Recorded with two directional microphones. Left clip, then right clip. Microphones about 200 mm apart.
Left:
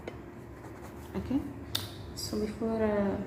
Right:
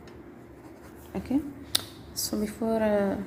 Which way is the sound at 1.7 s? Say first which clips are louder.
Right 6 dB; 40° right (ahead or behind).